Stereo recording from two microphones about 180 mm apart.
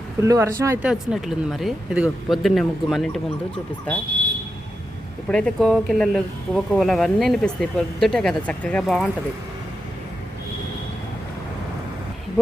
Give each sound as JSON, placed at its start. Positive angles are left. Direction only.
{"t": 0.2, "sound": "speech", "side_deg": -15}
{"t": 0.9, "sound": "speech", "side_deg": -5}
{"t": 5.3, "sound": "speech", "side_deg": 5}